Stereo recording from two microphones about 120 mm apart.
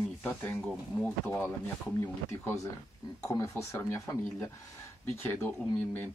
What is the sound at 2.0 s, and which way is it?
Speech, 20° left (ahead or behind).